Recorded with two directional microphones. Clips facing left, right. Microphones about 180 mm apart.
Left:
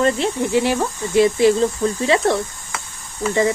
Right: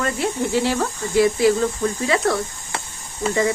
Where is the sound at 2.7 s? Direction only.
30° right (ahead or behind).